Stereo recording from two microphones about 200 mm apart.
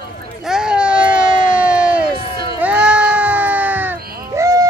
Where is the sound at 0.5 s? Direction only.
5° right (ahead or behind).